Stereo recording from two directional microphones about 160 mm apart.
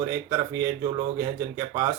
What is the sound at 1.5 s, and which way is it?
Speech, 20° right (ahead or behind).